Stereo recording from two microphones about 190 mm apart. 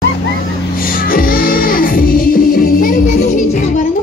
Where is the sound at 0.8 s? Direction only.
50° left (ahead or behind).